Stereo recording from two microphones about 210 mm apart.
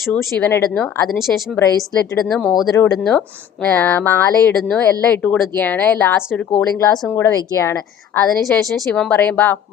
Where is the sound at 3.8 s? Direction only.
10° left (ahead or behind).